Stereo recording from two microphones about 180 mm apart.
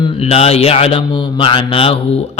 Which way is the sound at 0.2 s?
35° left (ahead or behind).